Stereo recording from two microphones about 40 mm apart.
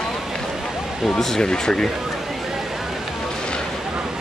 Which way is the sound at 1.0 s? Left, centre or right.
Centre.